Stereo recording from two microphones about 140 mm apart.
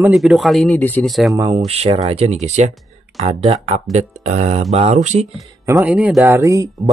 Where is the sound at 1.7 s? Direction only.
45° right (ahead or behind).